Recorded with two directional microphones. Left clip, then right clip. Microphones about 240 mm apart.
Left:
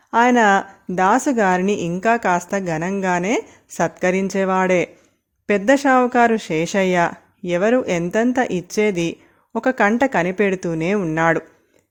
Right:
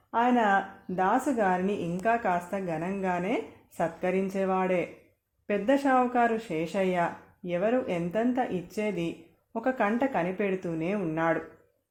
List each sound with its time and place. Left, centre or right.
0.1 s speech: left